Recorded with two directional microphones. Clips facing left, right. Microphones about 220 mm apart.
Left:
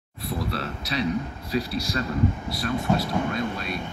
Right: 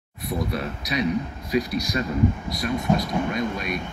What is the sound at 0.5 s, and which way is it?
Speech, 15° right (ahead or behind).